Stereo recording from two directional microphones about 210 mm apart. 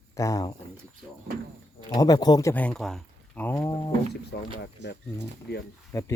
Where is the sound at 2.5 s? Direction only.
5° left (ahead or behind).